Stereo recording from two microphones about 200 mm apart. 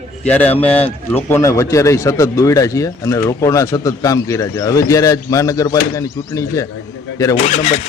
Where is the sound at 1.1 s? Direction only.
10° left (ahead or behind).